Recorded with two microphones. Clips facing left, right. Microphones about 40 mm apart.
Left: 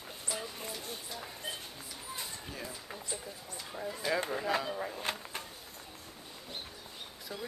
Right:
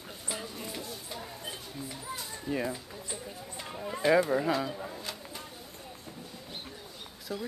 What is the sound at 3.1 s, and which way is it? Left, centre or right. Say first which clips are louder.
Speech: right 4 dB; right.